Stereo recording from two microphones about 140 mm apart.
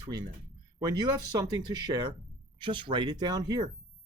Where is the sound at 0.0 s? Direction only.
30° right (ahead or behind).